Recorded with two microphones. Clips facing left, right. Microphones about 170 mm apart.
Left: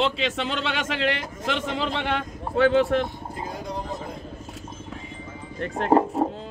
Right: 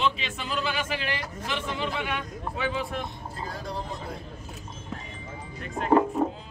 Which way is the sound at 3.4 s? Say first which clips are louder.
Left 2 dB; 20° left (ahead or behind).